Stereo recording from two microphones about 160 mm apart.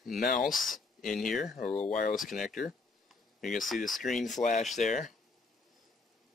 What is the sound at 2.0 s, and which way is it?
Speech, 60° left (ahead or behind).